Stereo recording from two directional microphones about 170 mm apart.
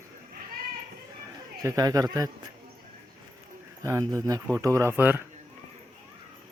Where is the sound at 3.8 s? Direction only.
20° right (ahead or behind).